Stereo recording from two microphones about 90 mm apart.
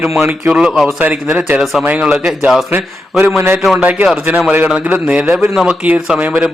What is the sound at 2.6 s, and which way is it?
A man's voice, 25° right (ahead or behind).